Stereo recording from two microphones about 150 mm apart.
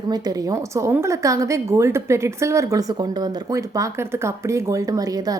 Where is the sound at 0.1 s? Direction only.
25° right (ahead or behind).